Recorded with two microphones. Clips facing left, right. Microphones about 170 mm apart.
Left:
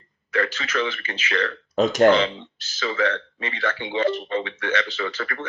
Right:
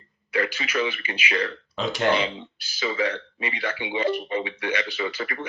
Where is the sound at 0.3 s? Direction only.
15° right (ahead or behind).